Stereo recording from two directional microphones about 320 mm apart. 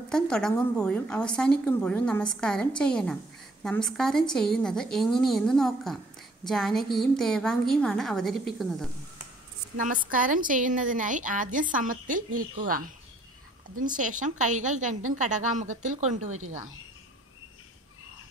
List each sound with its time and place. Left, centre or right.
0.1 s a woman's voice: centre
9.8 s a woman's voice: right
13.9 s a woman's voice: right